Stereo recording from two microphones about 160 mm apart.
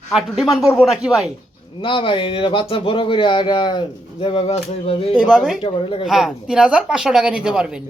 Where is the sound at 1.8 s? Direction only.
30° left (ahead or behind).